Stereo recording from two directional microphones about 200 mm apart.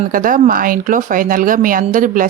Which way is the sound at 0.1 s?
45° right (ahead or behind).